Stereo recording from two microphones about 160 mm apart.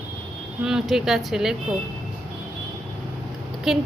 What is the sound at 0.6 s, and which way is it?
Speech, 5° right (ahead or behind).